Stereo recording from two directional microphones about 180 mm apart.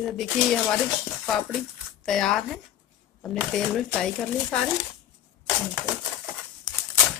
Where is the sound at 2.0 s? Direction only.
Centre (ahead or behind).